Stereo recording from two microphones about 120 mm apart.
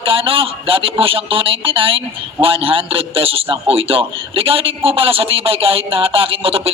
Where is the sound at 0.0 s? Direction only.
50° right (ahead or behind).